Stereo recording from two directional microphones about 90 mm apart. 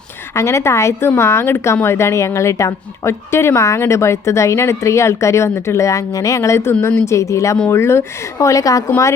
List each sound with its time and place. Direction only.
0.3 s a woman's voice: 30° left (ahead or behind)